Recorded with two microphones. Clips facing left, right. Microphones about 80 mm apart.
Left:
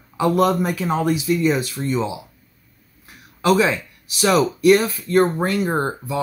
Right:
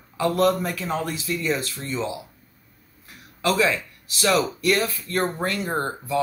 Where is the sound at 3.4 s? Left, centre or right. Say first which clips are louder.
Left 4 dB; left.